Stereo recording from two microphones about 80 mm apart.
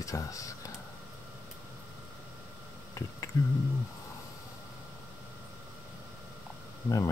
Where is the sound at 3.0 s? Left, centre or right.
Left.